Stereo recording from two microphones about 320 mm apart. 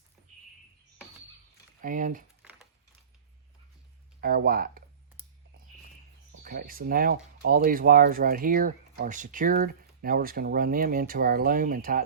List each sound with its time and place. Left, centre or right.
1.8 s speech: right
2.4 s a sound: centre
4.2 s speech: right
6.4 s speech: right